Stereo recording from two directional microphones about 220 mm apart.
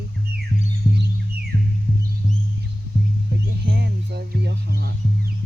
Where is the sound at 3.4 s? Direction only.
50° right (ahead or behind).